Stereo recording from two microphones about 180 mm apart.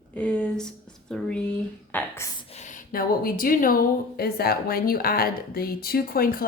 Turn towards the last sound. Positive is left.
turn(degrees=55)  # may be behind; listen again after turning